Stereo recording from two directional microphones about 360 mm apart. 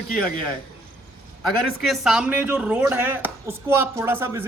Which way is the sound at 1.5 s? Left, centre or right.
Centre.